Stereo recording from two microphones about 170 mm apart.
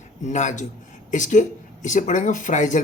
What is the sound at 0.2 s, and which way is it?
A man's voice, 45° left (ahead or behind).